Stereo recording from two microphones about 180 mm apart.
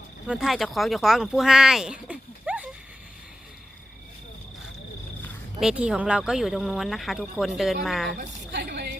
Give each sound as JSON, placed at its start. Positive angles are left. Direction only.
{"t": 0.3, "sound": "speech", "side_deg": 0}
{"t": 5.5, "sound": "speech", "side_deg": -5}
{"t": 8.1, "sound": "a sound", "side_deg": -65}